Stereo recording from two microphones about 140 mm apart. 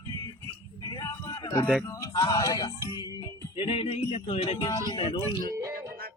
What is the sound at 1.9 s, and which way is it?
Music, 25° left (ahead or behind).